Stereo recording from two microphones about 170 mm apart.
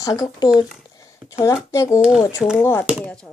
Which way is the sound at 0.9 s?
20° left (ahead or behind).